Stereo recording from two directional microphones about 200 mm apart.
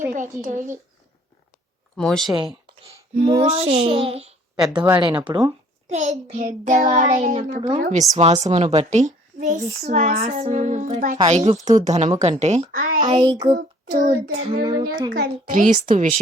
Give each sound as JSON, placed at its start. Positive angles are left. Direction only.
{"t": 0.1, "sound": "a woman's voice", "side_deg": -40}
{"t": 2.0, "sound": "speech", "side_deg": 0}
{"t": 3.2, "sound": "speech", "side_deg": -30}
{"t": 5.9, "sound": "a woman's voice", "side_deg": -35}
{"t": 13.0, "sound": "speech", "side_deg": -20}
{"t": 13.6, "sound": "child singing", "side_deg": -45}
{"t": 14.3, "sound": "speech", "side_deg": -30}
{"t": 15.1, "sound": "a woman's voice", "side_deg": -45}